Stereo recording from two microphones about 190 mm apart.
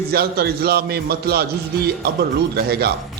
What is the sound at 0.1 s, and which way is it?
Speech, 55° right (ahead or behind).